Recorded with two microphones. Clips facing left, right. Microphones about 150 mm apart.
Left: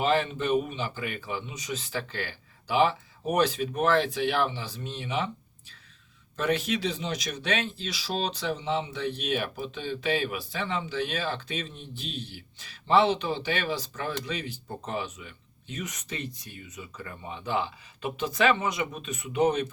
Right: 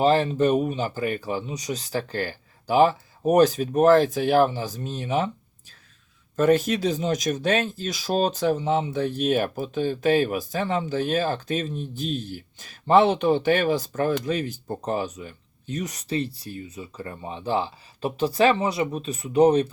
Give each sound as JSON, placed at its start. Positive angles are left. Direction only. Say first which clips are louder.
{"t": 0.0, "sound": "speech", "louder": "right 6 dB", "side_deg": -35}
{"t": 6.3, "sound": "speech", "louder": "right 8 dB", "side_deg": -45}